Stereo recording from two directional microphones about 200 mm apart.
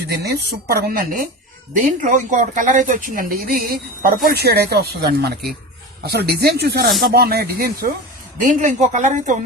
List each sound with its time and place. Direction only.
0.7 s speech: 45° right (ahead or behind)